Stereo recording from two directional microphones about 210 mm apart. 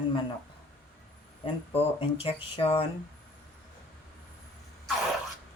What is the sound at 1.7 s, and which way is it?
Speech, 25° left (ahead or behind).